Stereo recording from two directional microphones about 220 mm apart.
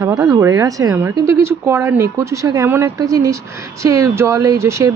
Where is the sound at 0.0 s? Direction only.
15° right (ahead or behind).